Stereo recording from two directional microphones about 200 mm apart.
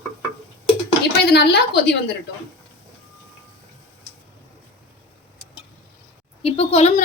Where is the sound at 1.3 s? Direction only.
55° left (ahead or behind).